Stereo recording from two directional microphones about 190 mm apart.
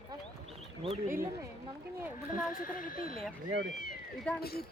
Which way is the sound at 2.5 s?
45° left (ahead or behind).